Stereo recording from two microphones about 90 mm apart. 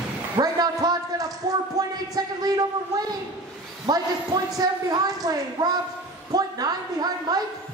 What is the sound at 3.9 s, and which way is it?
A man's voice, 45° right (ahead or behind).